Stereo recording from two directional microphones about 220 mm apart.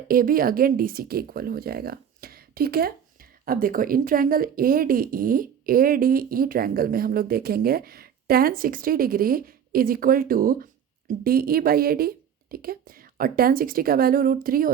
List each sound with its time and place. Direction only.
0.1 s speech: 40° right (ahead or behind)